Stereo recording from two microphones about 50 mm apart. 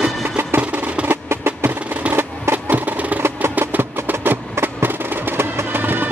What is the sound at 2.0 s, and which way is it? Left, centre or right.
Music, right.